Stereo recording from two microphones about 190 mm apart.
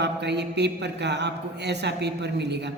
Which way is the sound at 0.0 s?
65° right (ahead or behind).